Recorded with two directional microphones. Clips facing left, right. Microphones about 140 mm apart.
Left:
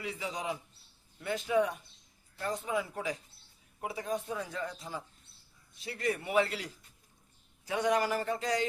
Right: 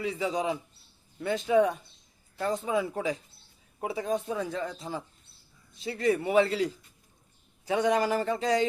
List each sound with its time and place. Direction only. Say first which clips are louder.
0.0 s a man's voice: right 8 dB; 25° right (ahead or behind)